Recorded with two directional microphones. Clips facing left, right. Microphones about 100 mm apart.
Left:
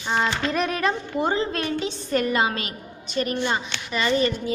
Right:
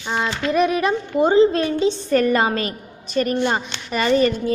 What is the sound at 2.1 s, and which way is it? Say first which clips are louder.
A woman's voice: right 3 dB; 40° right (ahead or behind).